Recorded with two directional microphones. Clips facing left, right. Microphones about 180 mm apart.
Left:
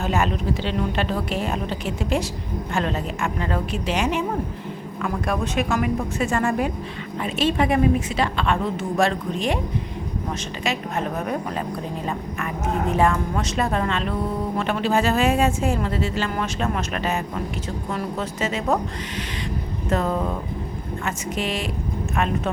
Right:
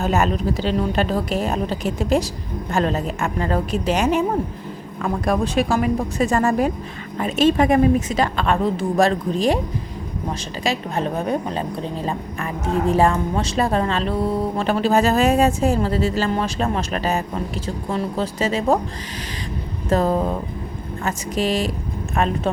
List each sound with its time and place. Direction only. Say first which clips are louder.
0.0 s speech: right 3 dB; 40° right (ahead or behind)
10.6 s a woman's voice: right 4 dB; 35° right (ahead or behind)
12.9 s speech: right 3 dB; 30° right (ahead or behind)
19.9 s speech: right 4 dB; 35° right (ahead or behind)